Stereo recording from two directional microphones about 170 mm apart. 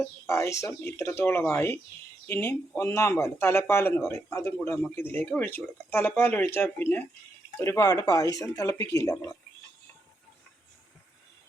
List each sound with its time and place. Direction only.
0.0 s speech: 15° left (ahead or behind)